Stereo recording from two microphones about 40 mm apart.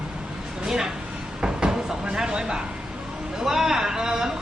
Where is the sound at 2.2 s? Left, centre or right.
Centre.